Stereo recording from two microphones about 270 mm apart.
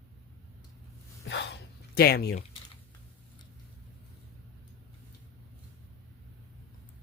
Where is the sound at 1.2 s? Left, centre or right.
Left.